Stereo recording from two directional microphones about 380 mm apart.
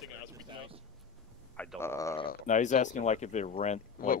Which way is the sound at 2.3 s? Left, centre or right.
Left.